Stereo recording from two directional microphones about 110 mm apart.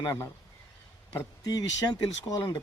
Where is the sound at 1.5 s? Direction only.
35° left (ahead or behind).